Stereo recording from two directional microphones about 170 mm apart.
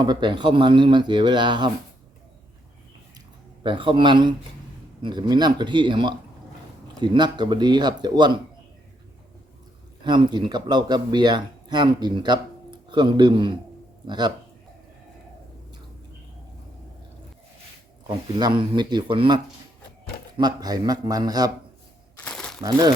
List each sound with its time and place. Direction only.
0.0 s speech: 25° right (ahead or behind)
3.6 s speech: 30° right (ahead or behind)
10.0 s speech: 25° right (ahead or behind)
18.1 s speech: 25° right (ahead or behind)
22.2 s crumpling: 5° left (ahead or behind)